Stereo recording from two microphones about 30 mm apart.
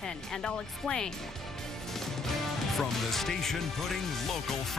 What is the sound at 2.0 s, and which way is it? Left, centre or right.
A woman's voice, centre.